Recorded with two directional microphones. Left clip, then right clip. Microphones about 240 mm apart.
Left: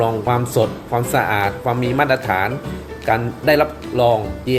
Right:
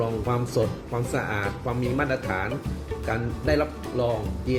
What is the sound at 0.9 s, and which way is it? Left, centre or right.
Speech, centre.